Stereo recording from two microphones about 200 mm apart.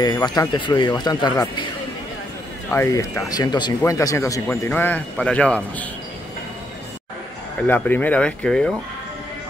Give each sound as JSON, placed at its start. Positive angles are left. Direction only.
{"t": 0.0, "sound": "speech", "side_deg": 20}
{"t": 2.7, "sound": "speech", "side_deg": 15}
{"t": 7.6, "sound": "speech", "side_deg": 10}